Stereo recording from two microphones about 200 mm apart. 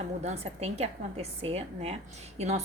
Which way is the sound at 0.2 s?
35° right (ahead or behind).